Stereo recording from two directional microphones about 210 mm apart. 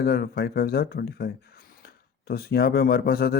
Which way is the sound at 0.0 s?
50° left (ahead or behind).